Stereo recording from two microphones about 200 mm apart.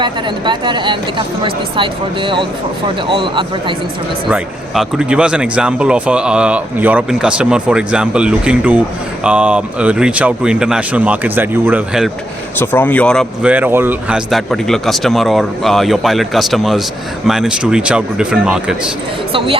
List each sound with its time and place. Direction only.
0.0 s speech: 25° right (ahead or behind)
4.3 s speech: 5° right (ahead or behind)
12.5 s speech: 10° left (ahead or behind)
19.3 s speech: 25° right (ahead or behind)